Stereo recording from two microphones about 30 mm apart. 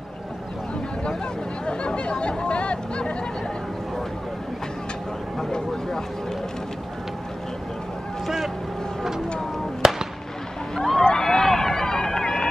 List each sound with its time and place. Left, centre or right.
1.7 s chatter: left
5.5 s vehicle: centre
9.8 s fireworks: centre
11.0 s run: centre